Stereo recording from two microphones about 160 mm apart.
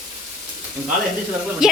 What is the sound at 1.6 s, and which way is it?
Speech, 5° right (ahead or behind).